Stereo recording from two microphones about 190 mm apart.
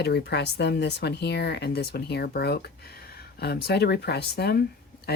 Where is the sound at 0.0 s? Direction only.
60° left (ahead or behind).